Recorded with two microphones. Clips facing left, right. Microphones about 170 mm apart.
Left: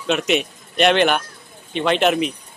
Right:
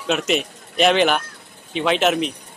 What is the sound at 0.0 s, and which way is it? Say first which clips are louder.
A man's voice: left 1 dB; centre (ahead or behind).